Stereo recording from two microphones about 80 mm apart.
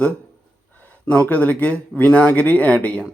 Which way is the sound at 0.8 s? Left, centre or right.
Left.